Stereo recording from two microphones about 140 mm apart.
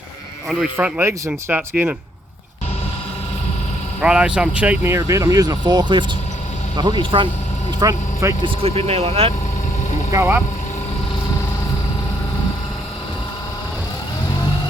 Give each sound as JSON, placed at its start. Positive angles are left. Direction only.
{"t": 0.4, "sound": "speech", "side_deg": -5}
{"t": 4.0, "sound": "speech", "side_deg": -5}
{"t": 7.8, "sound": "speech", "side_deg": -25}
{"t": 8.4, "sound": "speech", "side_deg": -45}
{"t": 10.1, "sound": "speech", "side_deg": -20}